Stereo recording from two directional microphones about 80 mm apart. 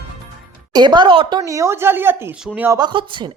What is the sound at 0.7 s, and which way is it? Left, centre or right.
Speech, right.